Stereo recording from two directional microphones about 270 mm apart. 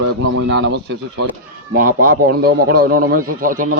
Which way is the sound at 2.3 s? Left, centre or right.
Right.